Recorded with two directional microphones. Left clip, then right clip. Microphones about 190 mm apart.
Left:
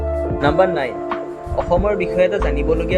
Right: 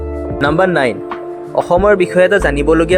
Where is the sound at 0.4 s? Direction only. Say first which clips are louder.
Right 4 dB; 30° right (ahead or behind).